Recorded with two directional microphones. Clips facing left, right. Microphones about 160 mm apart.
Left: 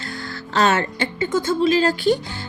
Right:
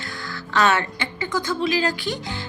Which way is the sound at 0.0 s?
30° left (ahead or behind).